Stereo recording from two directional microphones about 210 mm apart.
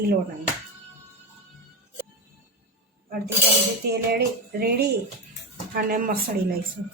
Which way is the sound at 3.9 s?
50° right (ahead or behind).